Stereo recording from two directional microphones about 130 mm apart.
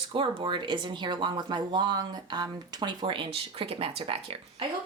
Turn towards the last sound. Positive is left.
turn(degrees=-45)  # may be behind; listen again after turning